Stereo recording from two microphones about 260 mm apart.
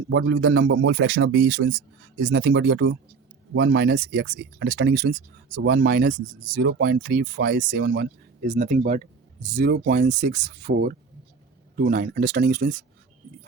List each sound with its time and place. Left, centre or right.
0.1 s a man's voice: right